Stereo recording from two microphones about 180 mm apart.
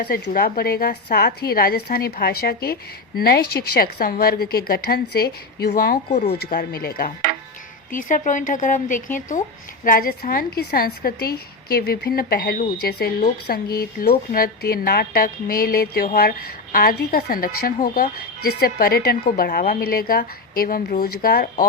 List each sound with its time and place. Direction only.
0.0 s a woman's voice: 55° left (ahead or behind)